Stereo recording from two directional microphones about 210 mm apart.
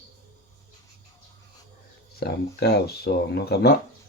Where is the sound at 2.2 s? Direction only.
50° left (ahead or behind).